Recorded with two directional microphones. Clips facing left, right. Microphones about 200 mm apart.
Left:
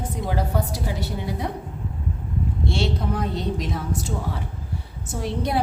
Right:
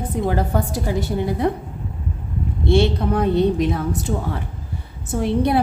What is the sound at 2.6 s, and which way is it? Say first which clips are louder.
A woman's voice: right 9 dB; 60° right (ahead or behind).